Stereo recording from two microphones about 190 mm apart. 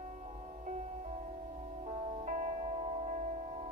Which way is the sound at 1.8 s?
40° right (ahead or behind).